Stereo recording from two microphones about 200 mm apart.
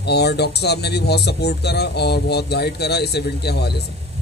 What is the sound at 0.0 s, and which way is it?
Speech, 55° left (ahead or behind).